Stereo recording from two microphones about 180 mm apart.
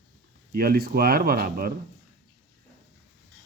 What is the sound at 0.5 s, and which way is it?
Speech, 55° right (ahead or behind).